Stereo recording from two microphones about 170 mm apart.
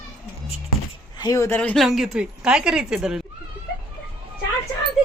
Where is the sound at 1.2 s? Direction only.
20° left (ahead or behind); by 3.2 s 5° right (ahead or behind).